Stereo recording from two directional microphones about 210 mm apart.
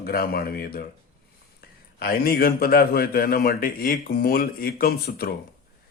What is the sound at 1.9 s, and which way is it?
A man's voice, 45° left (ahead or behind).